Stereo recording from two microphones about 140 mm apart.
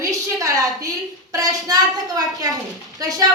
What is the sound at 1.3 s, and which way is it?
Speech, 25° right (ahead or behind).